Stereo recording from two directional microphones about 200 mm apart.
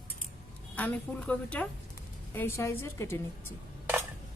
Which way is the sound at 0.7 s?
10° left (ahead or behind).